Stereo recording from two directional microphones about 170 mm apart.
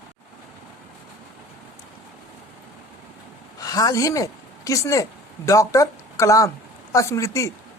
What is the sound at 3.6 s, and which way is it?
A woman's voice, 20° left (ahead or behind).